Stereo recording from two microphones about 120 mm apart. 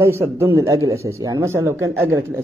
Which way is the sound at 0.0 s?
20° right (ahead or behind).